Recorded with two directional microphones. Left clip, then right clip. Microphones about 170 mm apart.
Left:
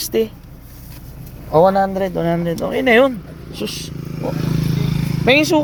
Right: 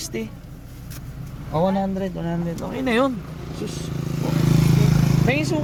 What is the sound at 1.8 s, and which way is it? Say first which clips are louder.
Speech: left 9 dB; 35° left (ahead or behind).